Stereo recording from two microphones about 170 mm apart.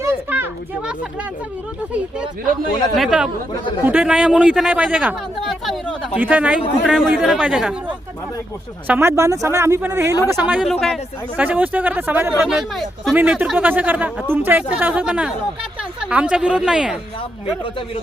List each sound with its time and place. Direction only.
0.0 s a sound: 10° right (ahead or behind)
2.9 s a man's voice: centre (ahead or behind)
8.9 s a man's voice: 15° right (ahead or behind); by 11.0 s centre (ahead or behind)
11.3 s a man's voice: 10° right (ahead or behind)
17.2 s speech: 30° left (ahead or behind)